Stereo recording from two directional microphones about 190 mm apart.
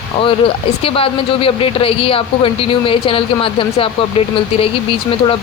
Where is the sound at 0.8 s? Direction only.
30° left (ahead or behind).